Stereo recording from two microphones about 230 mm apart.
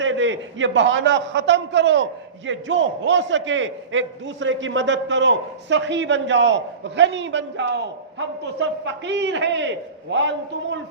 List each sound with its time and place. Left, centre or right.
0.0 s a man's voice: right